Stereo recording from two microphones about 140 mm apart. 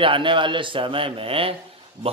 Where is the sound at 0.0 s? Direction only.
35° right (ahead or behind).